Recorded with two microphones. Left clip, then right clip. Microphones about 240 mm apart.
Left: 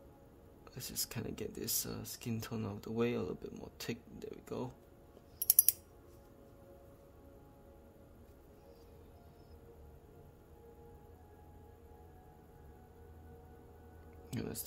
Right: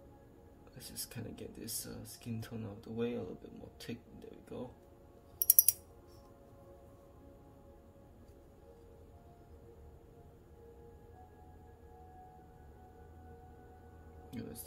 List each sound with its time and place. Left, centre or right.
0.7 s speech: left
14.3 s music: left